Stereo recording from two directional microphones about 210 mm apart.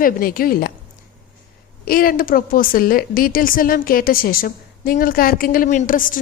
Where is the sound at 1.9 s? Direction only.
45° left (ahead or behind).